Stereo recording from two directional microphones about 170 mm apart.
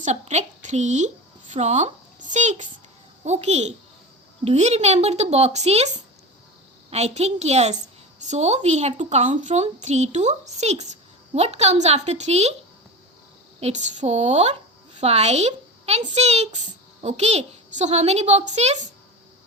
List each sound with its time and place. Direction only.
0.0 s a woman's voice: 40° right (ahead or behind)
6.9 s a woman's voice: 40° right (ahead or behind)
13.6 s a woman's voice: 40° right (ahead or behind)